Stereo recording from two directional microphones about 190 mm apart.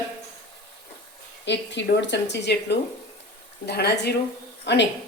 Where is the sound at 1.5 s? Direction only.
65° left (ahead or behind).